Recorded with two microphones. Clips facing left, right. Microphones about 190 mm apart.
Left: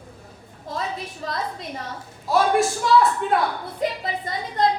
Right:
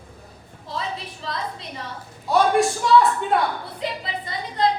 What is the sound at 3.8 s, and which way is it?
Speech, 50° left (ahead or behind).